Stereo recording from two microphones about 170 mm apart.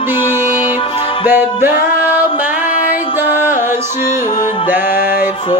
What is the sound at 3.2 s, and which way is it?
Music, 15° right (ahead or behind).